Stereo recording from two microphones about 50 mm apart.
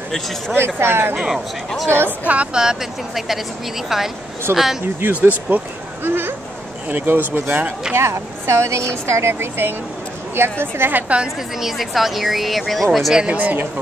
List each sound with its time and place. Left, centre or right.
0.1 s speech: centre
0.7 s a woman's voice: right
1.1 s speech: centre
2.2 s speech: right
2.6 s speech: centre
4.5 s a woman's voice: right
5.0 s speech: right
6.9 s speech: right
7.9 s a woman's voice: right
11.3 s speech: centre
13.3 s speech: right